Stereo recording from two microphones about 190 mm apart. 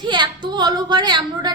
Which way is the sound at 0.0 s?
25° right (ahead or behind).